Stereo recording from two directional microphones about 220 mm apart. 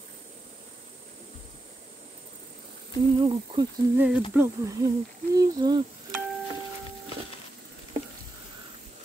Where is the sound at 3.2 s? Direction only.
20° right (ahead or behind).